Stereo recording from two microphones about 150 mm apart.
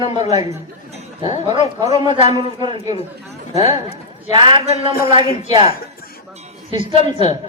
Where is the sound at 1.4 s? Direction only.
25° right (ahead or behind).